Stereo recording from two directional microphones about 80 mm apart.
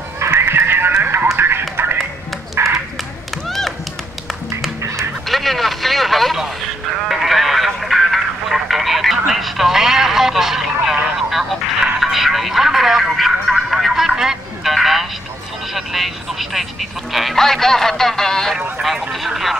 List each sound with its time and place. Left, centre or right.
0.2 s neigh: right
2.5 s a sound: right
3.4 s music: centre
4.8 s music: right
5.3 s vehicle: centre
7.1 s a sound: centre
15.7 s vehicle: centre
17.1 s a sound: centre
18.8 s vehicle: centre